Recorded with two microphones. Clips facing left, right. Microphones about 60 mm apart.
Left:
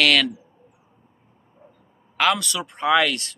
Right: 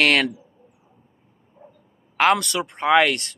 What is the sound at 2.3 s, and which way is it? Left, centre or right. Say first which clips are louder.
Speech: right 4 dB; right.